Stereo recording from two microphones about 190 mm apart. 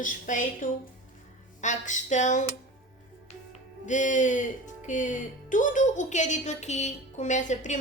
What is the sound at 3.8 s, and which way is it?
A woman's voice, 40° left (ahead or behind).